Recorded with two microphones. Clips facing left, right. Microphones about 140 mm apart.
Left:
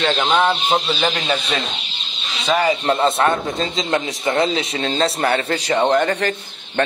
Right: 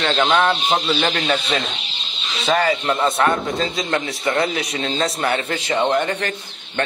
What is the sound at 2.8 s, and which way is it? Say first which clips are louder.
A man's voice: left 2 dB; 30° left (ahead or behind).